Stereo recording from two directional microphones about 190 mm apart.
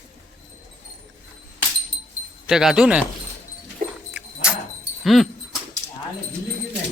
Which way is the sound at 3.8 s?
45° right (ahead or behind).